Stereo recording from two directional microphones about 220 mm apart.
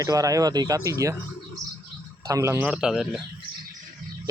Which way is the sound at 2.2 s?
15° right (ahead or behind).